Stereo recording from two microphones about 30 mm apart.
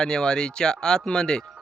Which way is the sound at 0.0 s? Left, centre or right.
Left.